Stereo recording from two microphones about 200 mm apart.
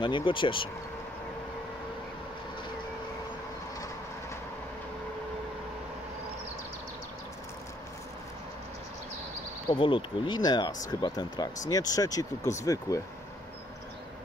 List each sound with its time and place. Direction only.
0.0 s speech: 25° left (ahead or behind)
9.8 s speech: 25° left (ahead or behind)